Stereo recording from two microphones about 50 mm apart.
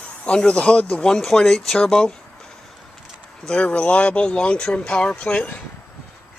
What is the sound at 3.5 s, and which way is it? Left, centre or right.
Speech, left.